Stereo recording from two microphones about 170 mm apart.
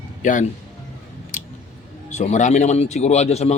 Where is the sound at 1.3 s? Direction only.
45° left (ahead or behind).